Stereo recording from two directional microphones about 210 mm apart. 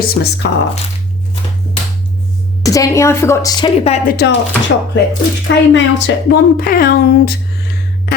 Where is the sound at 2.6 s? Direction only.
15° left (ahead or behind).